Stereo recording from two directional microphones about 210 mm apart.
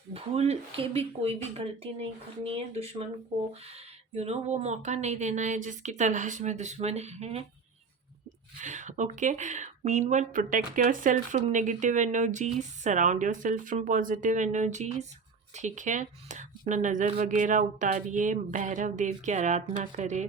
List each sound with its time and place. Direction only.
0.1 s speech: 30° right (ahead or behind)
8.6 s speech: 35° right (ahead or behind)